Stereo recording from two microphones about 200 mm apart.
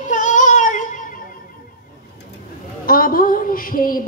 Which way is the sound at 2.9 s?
45° left (ahead or behind).